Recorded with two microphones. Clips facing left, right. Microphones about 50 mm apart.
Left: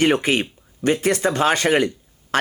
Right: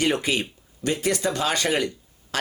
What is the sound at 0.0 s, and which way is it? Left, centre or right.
Speech, left.